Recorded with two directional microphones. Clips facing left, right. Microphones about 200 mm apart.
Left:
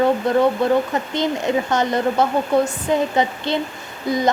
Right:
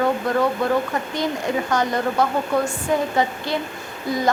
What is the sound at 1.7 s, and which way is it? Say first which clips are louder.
A woman's voice: left 1 dB; 20° left (ahead or behind).